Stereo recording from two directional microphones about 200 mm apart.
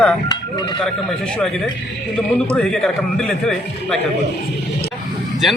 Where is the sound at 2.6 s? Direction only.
5° left (ahead or behind).